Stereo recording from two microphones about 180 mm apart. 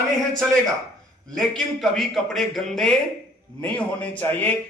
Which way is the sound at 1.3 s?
Centre (ahead or behind).